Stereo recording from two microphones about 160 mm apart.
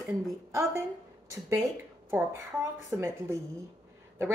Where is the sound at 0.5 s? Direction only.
20° right (ahead or behind).